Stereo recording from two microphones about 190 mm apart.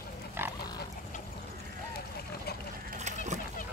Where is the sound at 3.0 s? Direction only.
35° right (ahead or behind).